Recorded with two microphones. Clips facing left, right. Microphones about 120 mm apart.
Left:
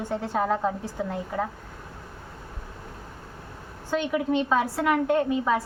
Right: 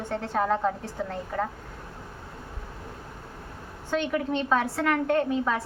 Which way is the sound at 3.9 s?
5° left (ahead or behind).